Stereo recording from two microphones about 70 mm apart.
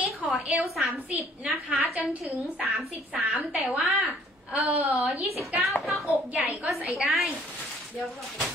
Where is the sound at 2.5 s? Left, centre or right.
Centre.